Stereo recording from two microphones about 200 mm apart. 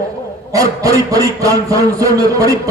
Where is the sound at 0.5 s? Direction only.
15° right (ahead or behind).